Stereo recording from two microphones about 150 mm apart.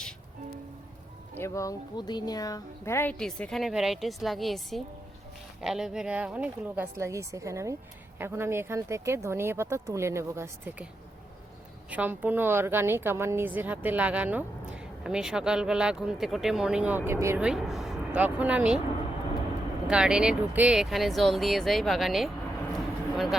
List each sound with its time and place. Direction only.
1.4 s speech: 20° left (ahead or behind)
3.2 s a woman's voice: 5° left (ahead or behind); by 10.8 s 15° right (ahead or behind)
11.9 s a woman's voice: 10° right (ahead or behind)
17.4 s speech: 5° right (ahead or behind)
19.9 s speech: 5° right (ahead or behind)
22.7 s a sound: centre (ahead or behind)